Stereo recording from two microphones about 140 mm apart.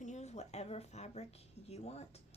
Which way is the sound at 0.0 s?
55° left (ahead or behind).